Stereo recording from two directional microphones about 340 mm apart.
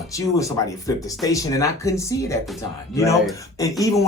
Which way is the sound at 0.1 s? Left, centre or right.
Centre.